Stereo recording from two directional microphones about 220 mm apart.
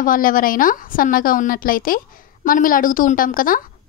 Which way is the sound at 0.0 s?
40° left (ahead or behind).